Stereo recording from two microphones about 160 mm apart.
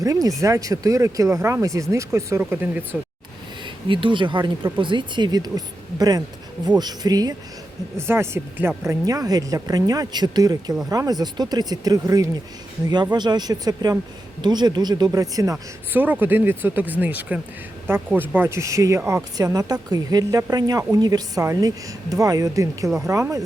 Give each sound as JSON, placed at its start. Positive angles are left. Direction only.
{"t": 0.0, "sound": "speech", "side_deg": -20}
{"t": 3.8, "sound": "speech", "side_deg": -30}
{"t": 15.9, "sound": "speech", "side_deg": -10}